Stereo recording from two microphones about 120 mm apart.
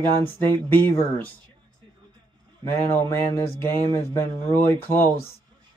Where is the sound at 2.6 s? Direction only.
20° left (ahead or behind).